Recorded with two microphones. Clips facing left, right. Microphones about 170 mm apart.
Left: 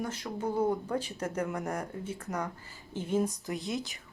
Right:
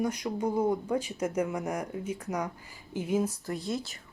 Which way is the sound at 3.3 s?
20° left (ahead or behind).